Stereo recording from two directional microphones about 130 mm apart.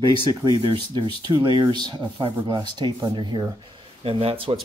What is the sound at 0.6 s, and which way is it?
Speech, 40° right (ahead or behind).